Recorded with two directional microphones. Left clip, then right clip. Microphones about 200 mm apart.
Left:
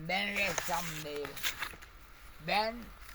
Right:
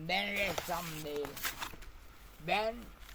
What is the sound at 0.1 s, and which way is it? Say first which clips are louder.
Speech: left 1 dB; 15° left (ahead or behind).